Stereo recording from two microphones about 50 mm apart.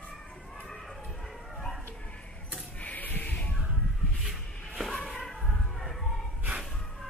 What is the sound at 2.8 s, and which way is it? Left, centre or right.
Sheep, left.